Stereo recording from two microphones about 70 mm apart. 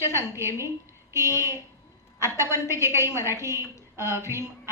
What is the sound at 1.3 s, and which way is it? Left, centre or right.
A woman's voice, right.